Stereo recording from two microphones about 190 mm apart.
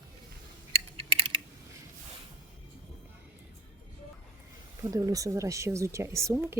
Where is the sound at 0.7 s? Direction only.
30° right (ahead or behind).